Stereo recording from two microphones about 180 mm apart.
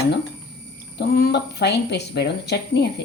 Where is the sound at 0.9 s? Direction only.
65° left (ahead or behind).